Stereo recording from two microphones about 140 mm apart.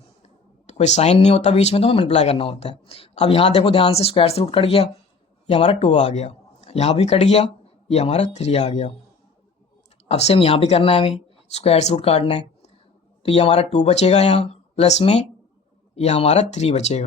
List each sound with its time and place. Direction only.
0.7 s speech: 50° left (ahead or behind)
10.1 s speech: 50° left (ahead or behind)